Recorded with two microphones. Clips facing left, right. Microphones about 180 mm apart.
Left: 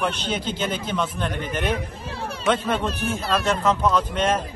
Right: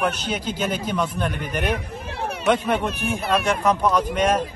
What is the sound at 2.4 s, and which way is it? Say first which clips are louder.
A man's voice: right 2 dB; 15° right (ahead or behind).